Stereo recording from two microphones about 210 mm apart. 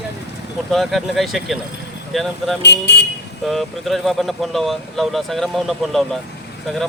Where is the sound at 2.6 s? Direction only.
55° left (ahead or behind).